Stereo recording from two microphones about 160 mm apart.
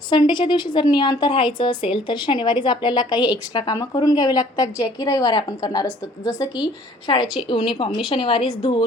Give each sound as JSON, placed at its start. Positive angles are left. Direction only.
{"t": 0.1, "sound": "a woman's voice", "side_deg": 30}